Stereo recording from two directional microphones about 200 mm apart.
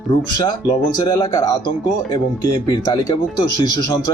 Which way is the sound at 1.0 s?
20° left (ahead or behind).